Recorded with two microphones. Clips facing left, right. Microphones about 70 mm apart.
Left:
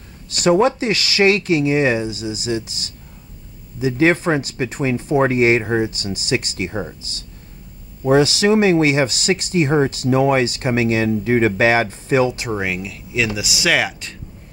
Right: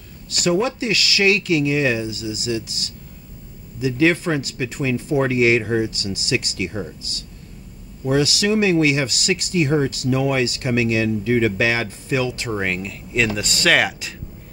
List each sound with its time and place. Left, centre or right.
0.4 s speech: left
3.8 s speech: left
8.0 s speech: left
12.5 s speech: centre